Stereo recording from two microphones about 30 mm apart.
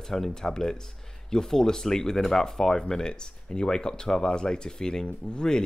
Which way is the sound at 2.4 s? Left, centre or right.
Centre.